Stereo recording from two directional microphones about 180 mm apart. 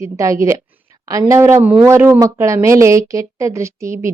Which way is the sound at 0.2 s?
15° right (ahead or behind).